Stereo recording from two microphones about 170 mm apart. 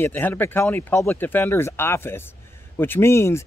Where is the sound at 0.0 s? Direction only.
10° left (ahead or behind).